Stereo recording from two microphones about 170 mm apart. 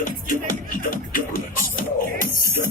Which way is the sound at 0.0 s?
50° left (ahead or behind).